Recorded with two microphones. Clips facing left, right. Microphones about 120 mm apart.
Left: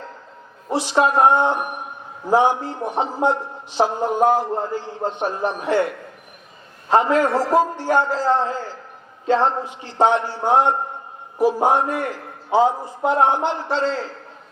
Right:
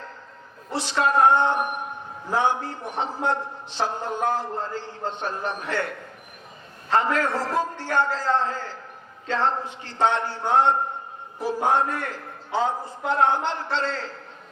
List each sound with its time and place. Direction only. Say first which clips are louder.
0.7 s a man's voice: left 5 dB; 15° left (ahead or behind)
6.9 s a man's voice: left 6 dB; 15° left (ahead or behind)